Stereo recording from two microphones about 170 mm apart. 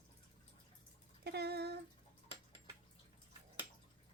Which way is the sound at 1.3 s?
70° right (ahead or behind).